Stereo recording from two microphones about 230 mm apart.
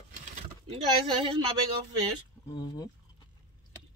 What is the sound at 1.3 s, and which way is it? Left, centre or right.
Speech, right.